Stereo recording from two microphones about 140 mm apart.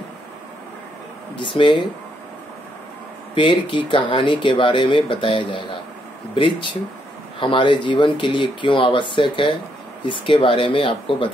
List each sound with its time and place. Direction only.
1.4 s speech: 35° left (ahead or behind)
3.3 s speech: 35° left (ahead or behind)